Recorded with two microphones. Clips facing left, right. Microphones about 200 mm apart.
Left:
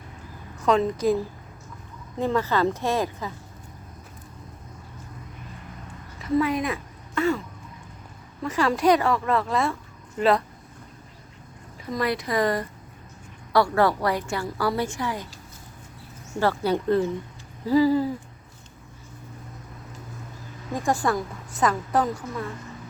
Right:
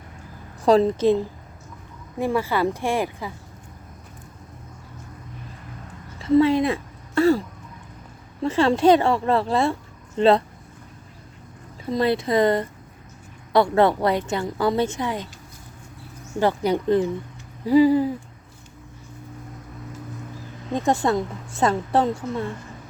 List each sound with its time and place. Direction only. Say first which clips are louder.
0.6 s a woman's voice: right 5 dB; 35° right (ahead or behind)
2.1 s a woman's voice: right 1 dB; 10° right (ahead or behind)
6.1 s a woman's voice: right 6 dB; 30° right (ahead or behind)
11.9 s a woman's voice: right 5 dB; 25° right (ahead or behind)
16.4 s a woman's voice: right 2 dB; 15° right (ahead or behind)
20.7 s a woman's voice: right 3 dB; 25° right (ahead or behind)